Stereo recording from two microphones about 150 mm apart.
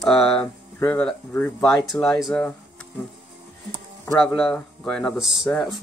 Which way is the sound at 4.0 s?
5° left (ahead or behind).